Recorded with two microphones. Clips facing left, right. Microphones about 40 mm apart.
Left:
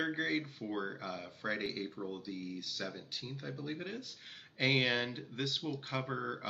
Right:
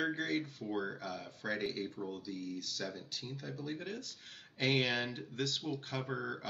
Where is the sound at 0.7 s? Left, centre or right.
Centre.